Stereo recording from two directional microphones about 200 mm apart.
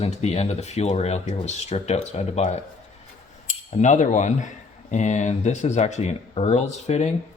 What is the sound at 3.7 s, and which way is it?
Speech, 35° left (ahead or behind).